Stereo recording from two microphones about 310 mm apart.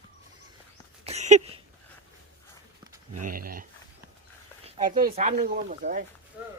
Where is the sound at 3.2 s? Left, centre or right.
Right.